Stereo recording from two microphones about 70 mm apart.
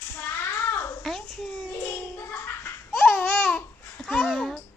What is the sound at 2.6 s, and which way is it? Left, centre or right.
Babbling, left.